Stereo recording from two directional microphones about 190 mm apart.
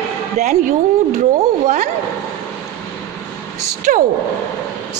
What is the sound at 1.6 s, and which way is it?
Speech, 40° right (ahead or behind).